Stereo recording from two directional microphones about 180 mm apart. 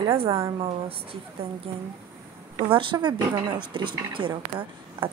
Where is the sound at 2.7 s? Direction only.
30° right (ahead or behind).